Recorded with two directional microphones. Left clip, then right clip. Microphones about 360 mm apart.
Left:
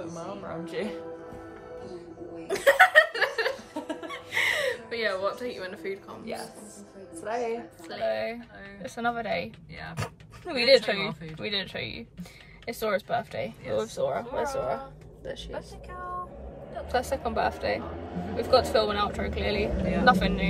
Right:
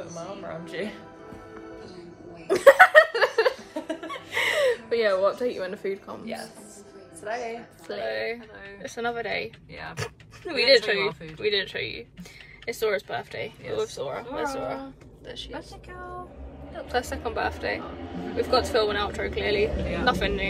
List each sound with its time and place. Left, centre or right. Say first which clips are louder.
0.5 s speech: left 1 dB; centre
2.4 s laughter: right 5 dB; centre
3.7 s chuckle: right 2 dB; centre
4.1 s a woman's voice: right 1 dB; centre
7.2 s speech: left 1 dB; centre
7.9 s speech: even; centre
16.9 s speech: left 1 dB; centre